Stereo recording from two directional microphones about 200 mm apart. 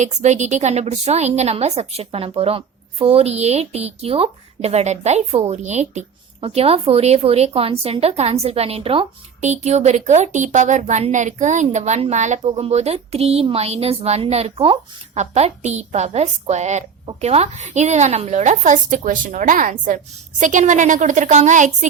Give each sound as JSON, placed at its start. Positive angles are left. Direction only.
{"t": 0.0, "sound": "a woman's voice", "side_deg": -35}